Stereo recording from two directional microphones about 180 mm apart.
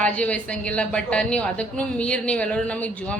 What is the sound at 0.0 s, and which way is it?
A woman's voice, 5° left (ahead or behind).